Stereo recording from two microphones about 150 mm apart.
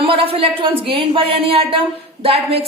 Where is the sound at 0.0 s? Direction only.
40° right (ahead or behind).